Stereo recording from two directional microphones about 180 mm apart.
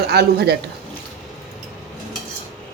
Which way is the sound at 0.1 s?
65° right (ahead or behind).